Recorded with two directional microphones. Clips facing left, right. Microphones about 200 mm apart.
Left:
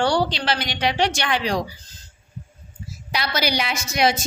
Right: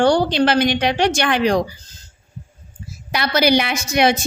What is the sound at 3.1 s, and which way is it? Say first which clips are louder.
A woman's voice: right 7 dB; 55° right (ahead or behind).